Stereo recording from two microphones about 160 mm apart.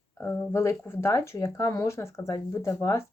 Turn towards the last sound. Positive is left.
turn(degrees=20)  # may be behind; listen again after turning